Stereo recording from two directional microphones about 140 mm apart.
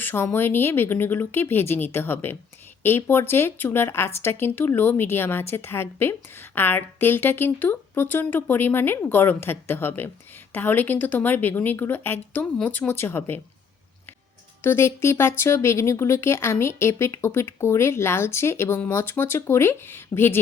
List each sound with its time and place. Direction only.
0.0 s a woman's voice: 15° left (ahead or behind)
14.6 s a woman's voice: 20° left (ahead or behind)